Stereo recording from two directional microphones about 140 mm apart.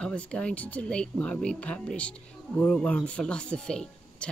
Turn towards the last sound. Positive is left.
turn(degrees=5)  # may be behind; listen again after turning